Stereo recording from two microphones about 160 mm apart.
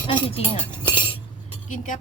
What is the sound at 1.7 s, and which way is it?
Dishes, 55° left (ahead or behind).